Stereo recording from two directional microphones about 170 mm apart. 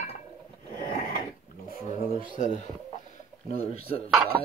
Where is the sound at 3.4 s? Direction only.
35° left (ahead or behind).